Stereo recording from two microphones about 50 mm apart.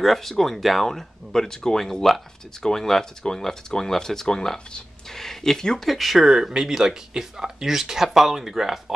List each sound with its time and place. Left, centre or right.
0.0 s speech: centre
5.9 s speech: centre